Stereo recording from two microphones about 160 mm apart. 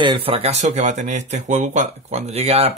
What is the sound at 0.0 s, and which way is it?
Speech, 35° right (ahead or behind).